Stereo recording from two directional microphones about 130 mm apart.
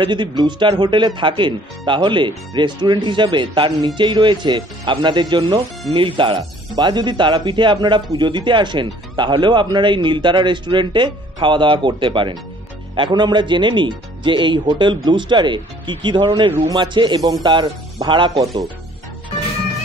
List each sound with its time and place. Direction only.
0.0 s speech: 35° right (ahead or behind)